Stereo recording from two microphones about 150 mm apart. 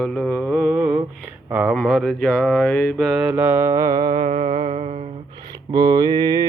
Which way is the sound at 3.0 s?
10° right (ahead or behind).